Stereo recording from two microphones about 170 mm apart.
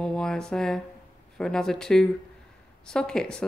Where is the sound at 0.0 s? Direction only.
5° left (ahead or behind).